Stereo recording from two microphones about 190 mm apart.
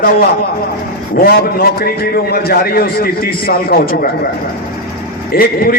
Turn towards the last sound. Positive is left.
turn(degrees=50)  # may be behind; listen again after turning